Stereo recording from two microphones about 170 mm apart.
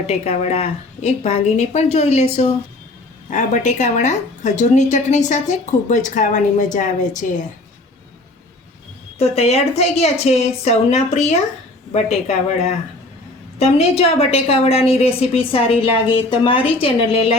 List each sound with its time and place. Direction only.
0.1 s a woman's voice: 40° left (ahead or behind)
9.1 s a woman's voice: 40° left (ahead or behind)
13.6 s a woman's voice: 40° left (ahead or behind)